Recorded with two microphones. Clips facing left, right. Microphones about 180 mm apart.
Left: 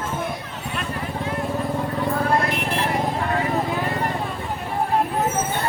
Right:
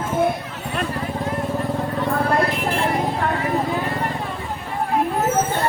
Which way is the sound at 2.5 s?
70° left (ahead or behind).